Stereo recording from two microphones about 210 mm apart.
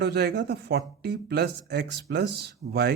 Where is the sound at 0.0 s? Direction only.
50° right (ahead or behind).